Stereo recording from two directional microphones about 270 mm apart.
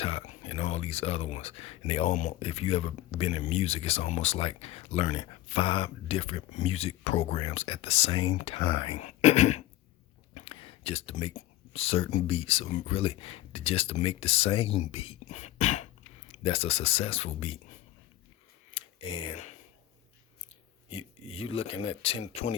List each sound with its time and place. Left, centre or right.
0.0 s speech: left
18.7 s a sound: left
20.9 s speech: left